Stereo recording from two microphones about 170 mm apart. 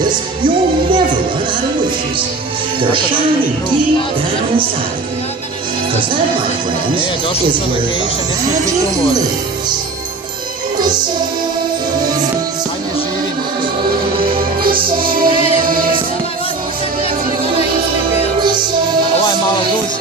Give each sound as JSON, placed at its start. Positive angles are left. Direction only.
{"t": 14.6, "sound": "music", "side_deg": -60}
{"t": 15.3, "sound": "music", "side_deg": 35}
{"t": 15.6, "sound": "music", "side_deg": -55}